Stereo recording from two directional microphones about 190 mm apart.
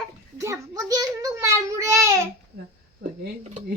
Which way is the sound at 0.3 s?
15° right (ahead or behind).